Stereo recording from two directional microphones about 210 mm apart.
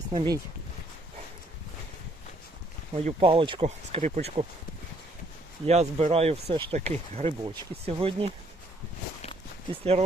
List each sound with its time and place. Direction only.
0.1 s speech: 20° right (ahead or behind)
2.9 s speech: 30° right (ahead or behind)
5.6 s speech: 30° right (ahead or behind)